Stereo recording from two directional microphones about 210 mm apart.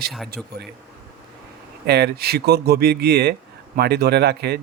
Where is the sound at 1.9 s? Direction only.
50° right (ahead or behind).